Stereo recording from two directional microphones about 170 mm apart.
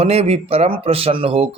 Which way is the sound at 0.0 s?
35° right (ahead or behind).